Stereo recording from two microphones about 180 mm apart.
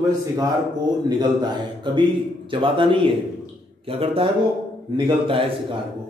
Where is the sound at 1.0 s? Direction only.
25° right (ahead or behind).